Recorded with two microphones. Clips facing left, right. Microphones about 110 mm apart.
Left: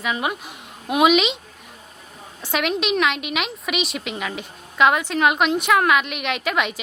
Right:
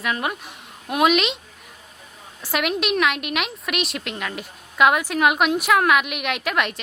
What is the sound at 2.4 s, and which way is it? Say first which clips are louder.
A woman's voice: left 1 dB; 5° right (ahead or behind).